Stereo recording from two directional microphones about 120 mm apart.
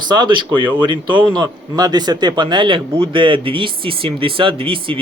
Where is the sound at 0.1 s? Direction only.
40° right (ahead or behind).